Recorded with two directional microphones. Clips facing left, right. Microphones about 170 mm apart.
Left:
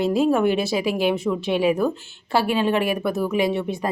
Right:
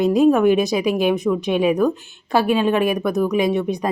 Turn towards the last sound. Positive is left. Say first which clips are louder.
# right 3 dB
turn(degrees=-15)  # may be behind; listen again after turning